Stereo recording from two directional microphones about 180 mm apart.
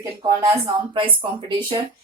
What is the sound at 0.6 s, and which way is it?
Speech, 30° right (ahead or behind).